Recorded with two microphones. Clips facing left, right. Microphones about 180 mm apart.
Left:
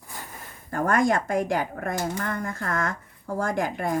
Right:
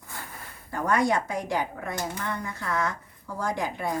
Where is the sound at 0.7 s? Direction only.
50° left (ahead or behind).